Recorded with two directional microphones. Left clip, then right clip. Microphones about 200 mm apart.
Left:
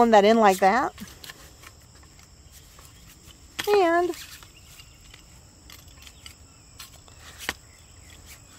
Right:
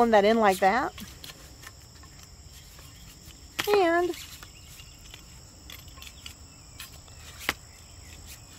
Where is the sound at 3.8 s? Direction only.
50° left (ahead or behind).